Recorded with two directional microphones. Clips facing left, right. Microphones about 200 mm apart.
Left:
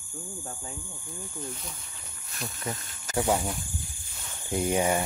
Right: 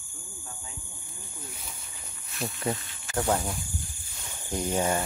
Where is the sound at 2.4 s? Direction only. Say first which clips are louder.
Right 5 dB; 40° right (ahead or behind).